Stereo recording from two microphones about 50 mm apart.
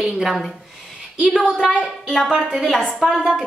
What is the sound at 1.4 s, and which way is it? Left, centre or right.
Speech, centre.